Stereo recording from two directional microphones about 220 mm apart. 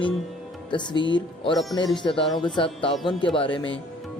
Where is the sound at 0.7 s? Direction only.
20° left (ahead or behind).